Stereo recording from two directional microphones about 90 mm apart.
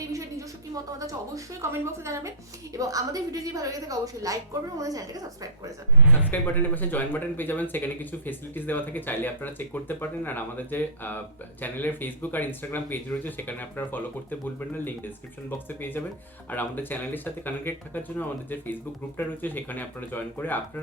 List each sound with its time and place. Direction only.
0.9 s a woman's voice: 35° right (ahead or behind)
6.0 s a man's voice: 20° right (ahead or behind)
6.3 s speech: 20° left (ahead or behind)